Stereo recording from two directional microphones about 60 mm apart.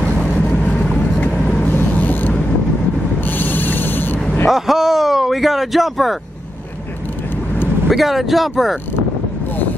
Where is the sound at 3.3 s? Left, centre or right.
Left.